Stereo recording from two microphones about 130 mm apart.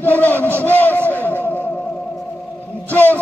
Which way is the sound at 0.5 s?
15° left (ahead or behind).